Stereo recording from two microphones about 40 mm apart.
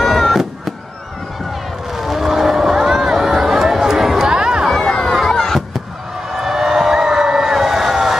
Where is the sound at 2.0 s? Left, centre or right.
Centre.